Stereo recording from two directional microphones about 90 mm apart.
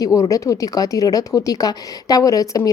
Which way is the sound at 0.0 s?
40° left (ahead or behind).